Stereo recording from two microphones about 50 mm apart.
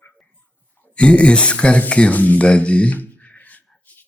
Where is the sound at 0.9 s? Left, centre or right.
Left.